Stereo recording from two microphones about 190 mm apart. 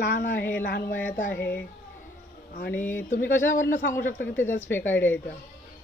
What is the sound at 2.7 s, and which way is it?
Speech, 10° left (ahead or behind).